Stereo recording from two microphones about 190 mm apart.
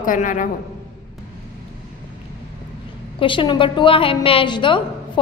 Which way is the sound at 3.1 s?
25° left (ahead or behind).